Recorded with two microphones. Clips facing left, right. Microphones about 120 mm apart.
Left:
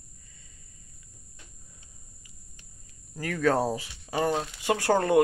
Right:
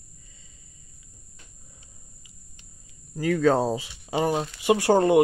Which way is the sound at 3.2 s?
20° right (ahead or behind).